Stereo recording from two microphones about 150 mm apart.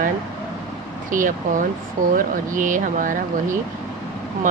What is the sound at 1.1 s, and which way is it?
Speech, 60° right (ahead or behind).